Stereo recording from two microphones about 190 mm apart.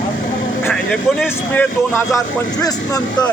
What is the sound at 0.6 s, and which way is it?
Speech, centre (ahead or behind).